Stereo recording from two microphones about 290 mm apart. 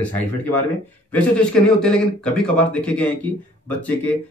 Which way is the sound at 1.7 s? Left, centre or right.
Centre.